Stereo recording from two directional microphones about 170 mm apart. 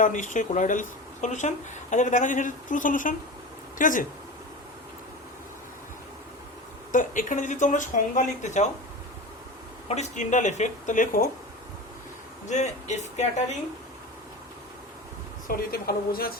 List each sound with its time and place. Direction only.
0.0 s speech: 50° left (ahead or behind)
6.9 s speech: 50° left (ahead or behind)
9.9 s speech: 45° left (ahead or behind)
12.5 s speech: 45° left (ahead or behind)
15.4 s speech: 60° left (ahead or behind)